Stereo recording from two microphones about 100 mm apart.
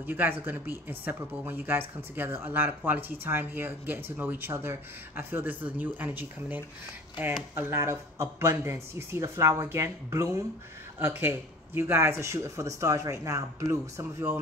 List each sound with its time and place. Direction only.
0.0 s speech: 20° right (ahead or behind)